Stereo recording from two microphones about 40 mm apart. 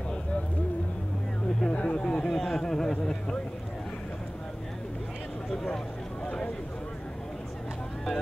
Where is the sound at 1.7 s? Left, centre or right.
Left.